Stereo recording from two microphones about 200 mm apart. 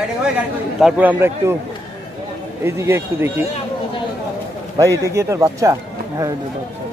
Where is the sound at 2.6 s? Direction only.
10° right (ahead or behind).